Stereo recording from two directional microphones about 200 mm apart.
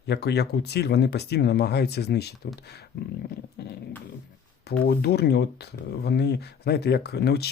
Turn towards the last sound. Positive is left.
turn(degrees=55)  # may be behind; listen again after turning